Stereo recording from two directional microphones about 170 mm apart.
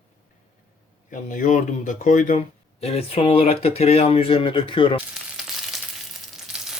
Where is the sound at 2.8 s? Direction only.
35° left (ahead or behind).